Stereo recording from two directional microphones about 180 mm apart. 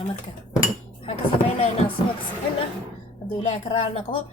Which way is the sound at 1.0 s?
30° left (ahead or behind).